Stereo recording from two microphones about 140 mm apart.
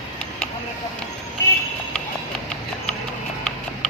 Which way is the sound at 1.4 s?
20° left (ahead or behind).